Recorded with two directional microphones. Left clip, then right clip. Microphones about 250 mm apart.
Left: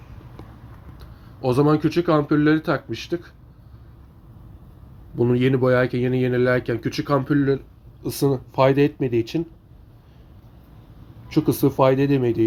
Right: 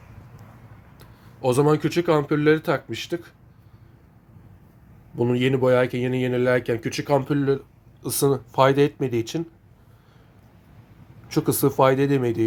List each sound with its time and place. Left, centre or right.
0.9 s speech: centre
5.1 s speech: centre
11.3 s speech: centre